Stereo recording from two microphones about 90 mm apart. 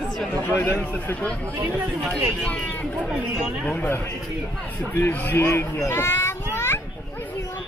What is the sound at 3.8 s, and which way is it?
A man's voice, 25° left (ahead or behind).